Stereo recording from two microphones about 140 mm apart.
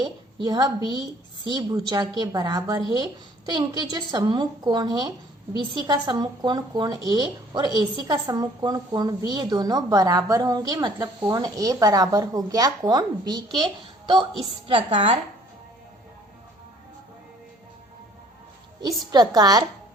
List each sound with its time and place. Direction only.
0.0 s a woman's voice: 30° right (ahead or behind)
14.7 s a woman's voice: 40° right (ahead or behind)
19.1 s a woman's voice: 30° right (ahead or behind)